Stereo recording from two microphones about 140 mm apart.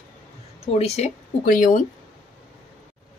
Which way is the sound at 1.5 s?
70° left (ahead or behind).